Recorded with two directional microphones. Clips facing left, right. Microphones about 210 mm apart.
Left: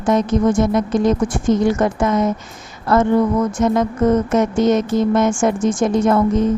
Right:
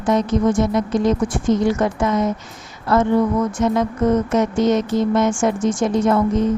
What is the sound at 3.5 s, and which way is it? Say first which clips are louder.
A woman's voice: left 2 dB; 45° left (ahead or behind).